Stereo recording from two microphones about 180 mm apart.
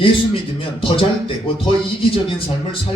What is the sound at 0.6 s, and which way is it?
A man's voice, 30° left (ahead or behind).